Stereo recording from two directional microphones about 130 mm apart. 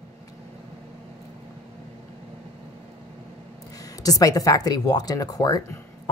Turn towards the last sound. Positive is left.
turn(degrees=30)  # may be behind; listen again after turning